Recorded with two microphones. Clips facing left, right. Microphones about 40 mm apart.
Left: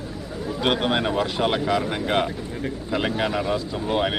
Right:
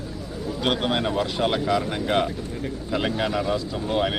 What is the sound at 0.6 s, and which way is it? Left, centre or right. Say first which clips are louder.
Speech: left 2 dB; centre.